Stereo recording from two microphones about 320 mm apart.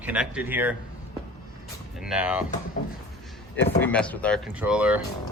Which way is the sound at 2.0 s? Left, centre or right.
Centre.